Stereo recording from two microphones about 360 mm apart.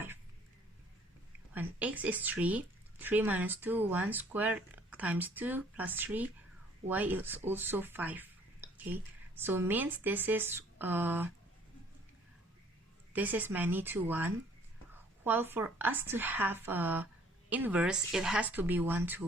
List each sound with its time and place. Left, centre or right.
1.5 s speech: centre
13.1 s speech: centre